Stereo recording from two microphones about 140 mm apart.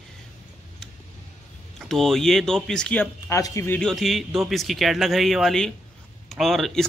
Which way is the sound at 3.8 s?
Centre (ahead or behind).